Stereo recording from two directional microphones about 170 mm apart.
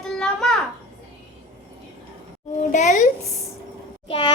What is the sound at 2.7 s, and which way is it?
Speech, 45° left (ahead or behind).